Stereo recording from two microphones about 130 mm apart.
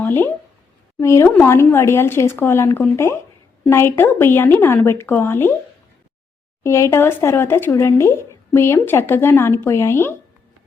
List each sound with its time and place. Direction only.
0.0 s a woman's voice: 15° left (ahead or behind)
6.6 s speech: 25° left (ahead or behind)